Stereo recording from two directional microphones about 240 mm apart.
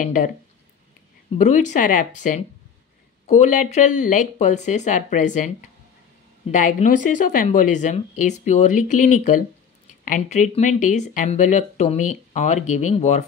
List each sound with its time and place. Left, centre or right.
1.4 s speech: left
6.5 s speech: left